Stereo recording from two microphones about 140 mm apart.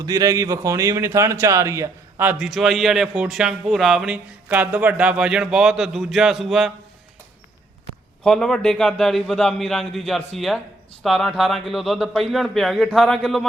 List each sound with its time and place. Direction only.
0.0 s a man's voice: 25° right (ahead or behind)
2.4 s a man's voice: centre (ahead or behind)
8.2 s a man's voice: 5° left (ahead or behind)